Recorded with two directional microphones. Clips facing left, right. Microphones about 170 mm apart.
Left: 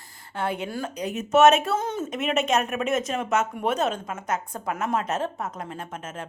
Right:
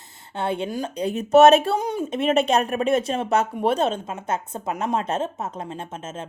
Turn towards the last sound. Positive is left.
turn(degrees=-25)  # may be behind; listen again after turning